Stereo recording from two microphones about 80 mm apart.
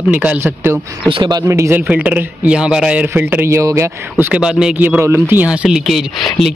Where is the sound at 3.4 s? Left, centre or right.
Right.